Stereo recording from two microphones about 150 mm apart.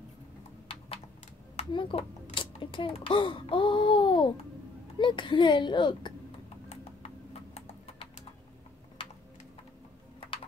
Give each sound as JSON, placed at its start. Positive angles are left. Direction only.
{"t": 1.7, "sound": "a child's voice", "side_deg": 35}
{"t": 6.7, "sound": "a sound", "side_deg": 45}
{"t": 7.5, "sound": "clip-clop", "side_deg": 45}